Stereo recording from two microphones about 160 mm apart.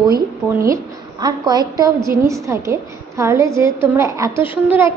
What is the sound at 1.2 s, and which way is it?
A woman's voice, 25° right (ahead or behind).